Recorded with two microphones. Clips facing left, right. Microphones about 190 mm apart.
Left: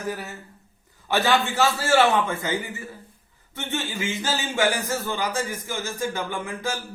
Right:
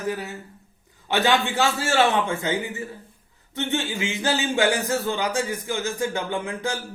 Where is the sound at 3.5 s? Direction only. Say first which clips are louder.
Right 4 dB; 20° right (ahead or behind).